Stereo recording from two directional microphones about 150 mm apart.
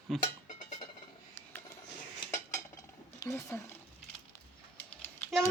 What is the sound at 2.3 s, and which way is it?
Dishes, 20° left (ahead or behind).